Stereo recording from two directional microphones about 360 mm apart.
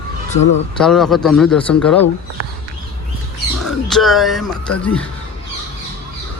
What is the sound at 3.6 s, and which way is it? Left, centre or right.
Speech, centre.